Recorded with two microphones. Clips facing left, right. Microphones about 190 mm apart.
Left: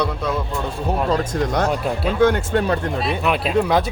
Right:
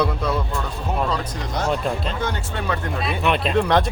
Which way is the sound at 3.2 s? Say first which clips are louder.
Even; 5° left (ahead or behind).